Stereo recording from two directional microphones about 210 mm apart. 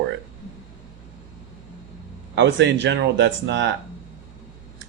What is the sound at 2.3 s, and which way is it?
Speech, 55° right (ahead or behind).